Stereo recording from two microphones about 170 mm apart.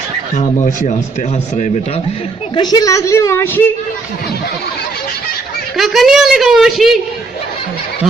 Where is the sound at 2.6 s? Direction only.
25° left (ahead or behind).